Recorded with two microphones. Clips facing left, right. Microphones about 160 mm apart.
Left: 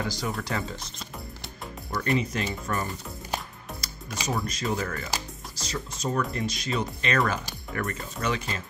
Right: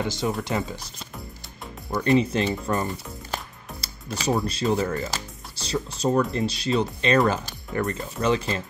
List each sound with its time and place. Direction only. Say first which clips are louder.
0.0 s speech: right 4 dB; 25° right (ahead or behind)
1.9 s speech: right 6 dB; 20° right (ahead or behind)